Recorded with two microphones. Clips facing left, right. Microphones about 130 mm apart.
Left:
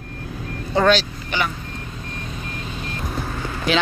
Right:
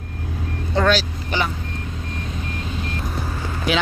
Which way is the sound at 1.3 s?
35° right (ahead or behind).